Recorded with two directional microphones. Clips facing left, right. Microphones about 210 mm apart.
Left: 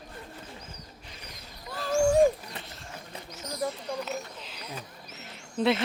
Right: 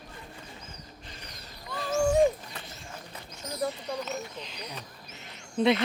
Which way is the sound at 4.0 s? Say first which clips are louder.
Even; 5° left (ahead or behind).